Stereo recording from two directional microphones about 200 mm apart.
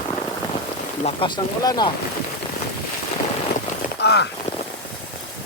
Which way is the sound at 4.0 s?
55° left (ahead or behind).